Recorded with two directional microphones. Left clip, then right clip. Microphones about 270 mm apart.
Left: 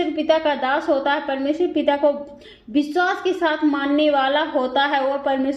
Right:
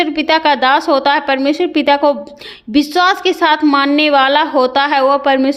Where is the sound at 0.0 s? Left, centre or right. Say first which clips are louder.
Right 6 dB; right.